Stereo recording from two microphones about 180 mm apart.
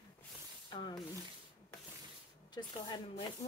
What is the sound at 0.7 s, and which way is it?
Rub, 25° left (ahead or behind).